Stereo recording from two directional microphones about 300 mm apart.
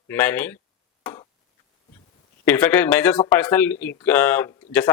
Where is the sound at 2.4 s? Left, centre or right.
Centre.